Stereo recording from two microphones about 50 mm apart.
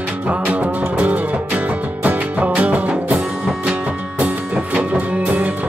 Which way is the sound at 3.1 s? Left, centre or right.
Centre.